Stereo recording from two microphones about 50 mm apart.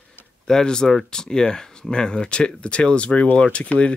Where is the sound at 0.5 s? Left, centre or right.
Centre.